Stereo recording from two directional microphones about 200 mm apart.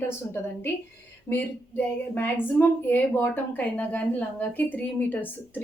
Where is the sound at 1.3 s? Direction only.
10° left (ahead or behind).